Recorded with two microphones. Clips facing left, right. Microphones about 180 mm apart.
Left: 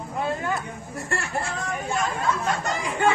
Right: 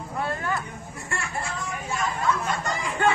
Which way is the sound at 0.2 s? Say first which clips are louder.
Left 2 dB; 15° left (ahead or behind).